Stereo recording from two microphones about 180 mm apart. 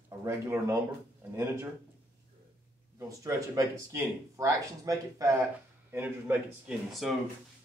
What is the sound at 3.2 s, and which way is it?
Speech, 20° right (ahead or behind).